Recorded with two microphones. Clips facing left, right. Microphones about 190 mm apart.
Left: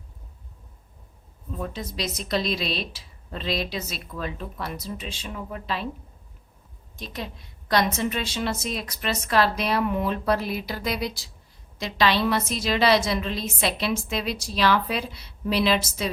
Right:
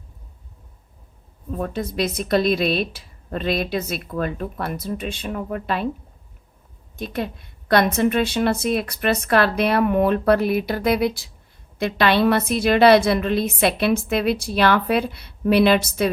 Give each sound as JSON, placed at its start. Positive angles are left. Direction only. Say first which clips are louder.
{"t": 1.5, "sound": "a woman's voice", "louder": "right 6 dB", "side_deg": -55}
{"t": 6.9, "sound": "a woman's voice", "louder": "right 8 dB", "side_deg": -55}